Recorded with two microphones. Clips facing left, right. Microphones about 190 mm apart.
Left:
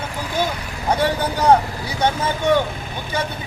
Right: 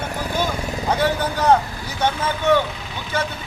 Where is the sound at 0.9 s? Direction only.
10° left (ahead or behind).